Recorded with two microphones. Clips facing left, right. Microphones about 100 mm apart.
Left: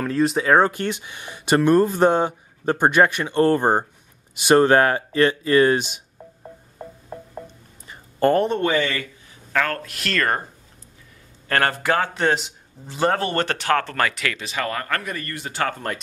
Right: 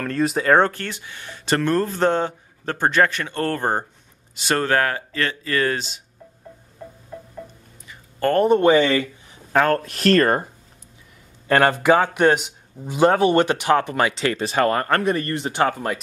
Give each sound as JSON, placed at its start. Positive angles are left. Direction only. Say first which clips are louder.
{"t": 0.0, "sound": "speech", "louder": "left 1 dB", "side_deg": 0}
{"t": 0.7, "sound": "speech", "louder": "left 4 dB", "side_deg": 15}
{"t": 8.5, "sound": "speech", "louder": "right 6 dB", "side_deg": -20}
{"t": 11.4, "sound": "speech", "louder": "right 5 dB", "side_deg": -15}